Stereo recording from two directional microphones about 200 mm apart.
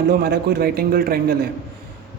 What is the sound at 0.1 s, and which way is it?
A man's voice, 50° right (ahead or behind).